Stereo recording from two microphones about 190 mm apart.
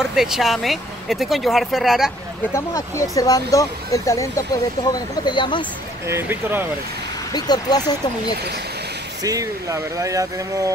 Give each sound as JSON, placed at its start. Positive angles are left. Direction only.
{"t": 0.0, "sound": "speech", "side_deg": -5}
{"t": 2.5, "sound": "speech", "side_deg": 15}
{"t": 6.0, "sound": "speech", "side_deg": -10}
{"t": 7.3, "sound": "speech", "side_deg": 20}
{"t": 9.2, "sound": "speech", "side_deg": -15}